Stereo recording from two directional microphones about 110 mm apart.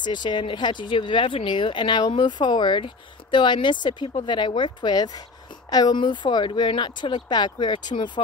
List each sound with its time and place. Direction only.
0.0 s speech: 45° left (ahead or behind)